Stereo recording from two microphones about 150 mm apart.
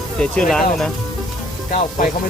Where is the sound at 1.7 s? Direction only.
65° left (ahead or behind).